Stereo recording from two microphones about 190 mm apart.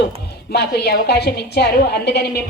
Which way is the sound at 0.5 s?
60° left (ahead or behind).